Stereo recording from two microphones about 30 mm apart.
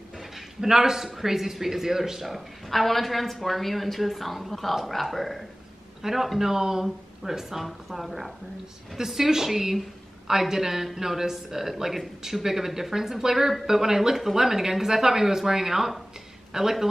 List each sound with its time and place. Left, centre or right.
0.6 s speech: centre
2.7 s a woman's voice: centre
6.0 s a man's voice: centre